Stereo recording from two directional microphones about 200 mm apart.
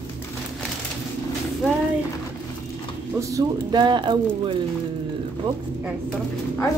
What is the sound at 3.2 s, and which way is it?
Speech, 20° right (ahead or behind).